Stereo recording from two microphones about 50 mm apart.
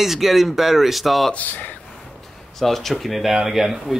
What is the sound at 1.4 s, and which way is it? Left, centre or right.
Speech, left.